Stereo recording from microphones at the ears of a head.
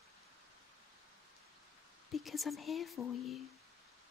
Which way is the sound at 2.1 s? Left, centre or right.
Left.